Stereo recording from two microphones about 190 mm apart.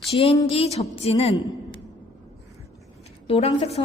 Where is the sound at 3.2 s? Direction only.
30° left (ahead or behind).